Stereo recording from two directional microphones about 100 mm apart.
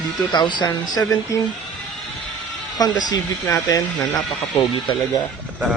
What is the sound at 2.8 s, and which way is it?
Speech, 40° left (ahead or behind).